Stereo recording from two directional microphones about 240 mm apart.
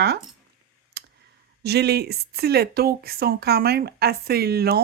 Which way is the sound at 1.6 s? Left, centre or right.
Right.